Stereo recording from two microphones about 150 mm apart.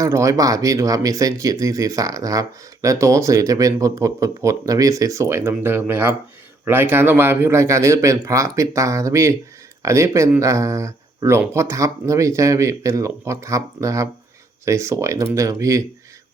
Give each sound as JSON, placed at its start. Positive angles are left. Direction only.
{"t": 0.0, "sound": "speech", "side_deg": -20}